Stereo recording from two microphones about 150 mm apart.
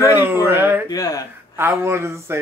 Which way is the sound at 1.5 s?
15° right (ahead or behind).